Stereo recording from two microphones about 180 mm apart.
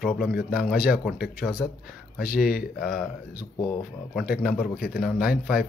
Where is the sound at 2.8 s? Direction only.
Centre (ahead or behind).